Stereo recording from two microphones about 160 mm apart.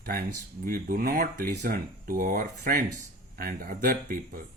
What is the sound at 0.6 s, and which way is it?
Speech, 65° right (ahead or behind).